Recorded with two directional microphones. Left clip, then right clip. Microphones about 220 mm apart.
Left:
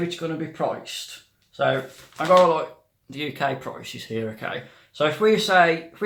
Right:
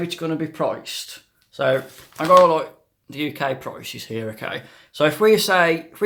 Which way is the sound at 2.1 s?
40° right (ahead or behind).